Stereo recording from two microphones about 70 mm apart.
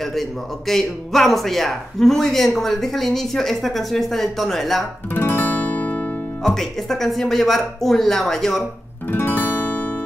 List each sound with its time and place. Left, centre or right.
0.0 s a man's voice: centre
5.1 s music: left
6.4 s a man's voice: centre
9.1 s music: left